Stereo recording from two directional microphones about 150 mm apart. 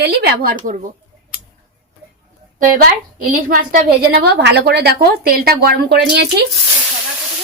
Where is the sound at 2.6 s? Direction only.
70° right (ahead or behind); by 6.4 s 90° right.